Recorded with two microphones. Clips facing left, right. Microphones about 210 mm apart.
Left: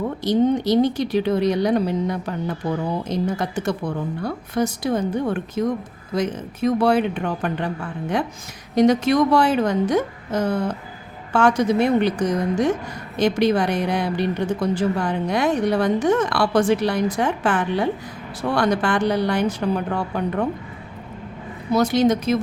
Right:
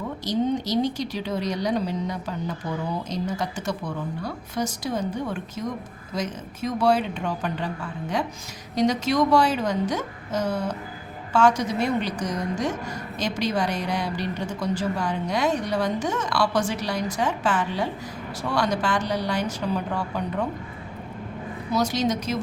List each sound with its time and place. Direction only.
0.3 s a woman's voice: 55° left (ahead or behind)
8.7 s a woman's voice: 55° left (ahead or behind)
21.7 s a woman's voice: 60° left (ahead or behind)